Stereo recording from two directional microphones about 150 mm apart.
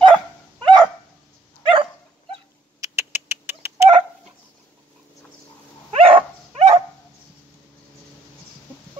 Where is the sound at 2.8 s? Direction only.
15° right (ahead or behind).